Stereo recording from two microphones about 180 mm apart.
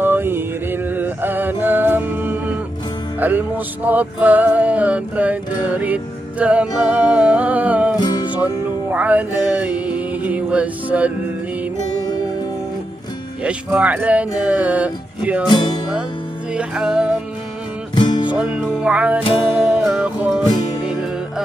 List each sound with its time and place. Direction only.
0.0 s music: 10° right (ahead or behind)
8.0 s music: 25° left (ahead or behind)
8.9 s music: 10° right (ahead or behind)
13.4 s music: 5° right (ahead or behind)
15.4 s music: 25° left (ahead or behind)
16.5 s music: 5° right (ahead or behind)
17.9 s music: 25° left (ahead or behind)
18.3 s music: 5° right (ahead or behind)